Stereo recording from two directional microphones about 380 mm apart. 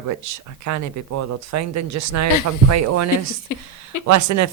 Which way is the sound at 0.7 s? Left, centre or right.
Right.